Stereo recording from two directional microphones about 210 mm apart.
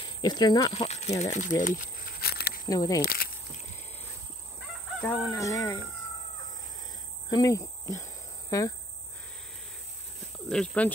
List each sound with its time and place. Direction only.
0.2 s speech: 20° left (ahead or behind)
1.2 s speech: 35° left (ahead or behind)
2.7 s fowl: 15° left (ahead or behind)
3.0 s speech: 45° left (ahead or behind)
5.0 s fowl: 15° left (ahead or behind)
7.2 s speech: 15° left (ahead or behind)
10.5 s speech: 5° left (ahead or behind)